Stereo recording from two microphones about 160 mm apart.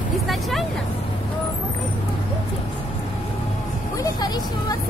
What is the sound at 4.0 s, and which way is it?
Speech, 25° left (ahead or behind).